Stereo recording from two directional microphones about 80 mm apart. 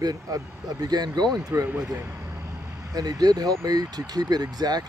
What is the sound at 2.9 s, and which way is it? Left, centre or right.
Speech, right.